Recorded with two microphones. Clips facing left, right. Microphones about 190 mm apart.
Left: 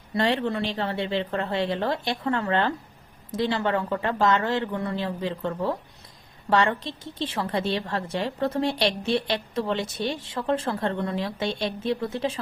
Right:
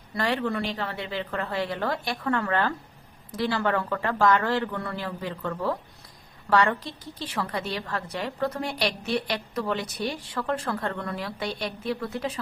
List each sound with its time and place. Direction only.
0.1 s speech: 25° left (ahead or behind)